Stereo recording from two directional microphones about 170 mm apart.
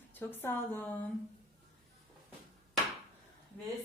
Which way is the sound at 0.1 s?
10° left (ahead or behind).